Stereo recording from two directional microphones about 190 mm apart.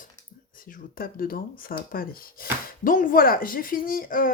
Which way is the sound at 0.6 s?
50° left (ahead or behind).